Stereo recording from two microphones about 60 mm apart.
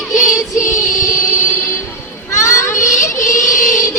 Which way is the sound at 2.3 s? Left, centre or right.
Left.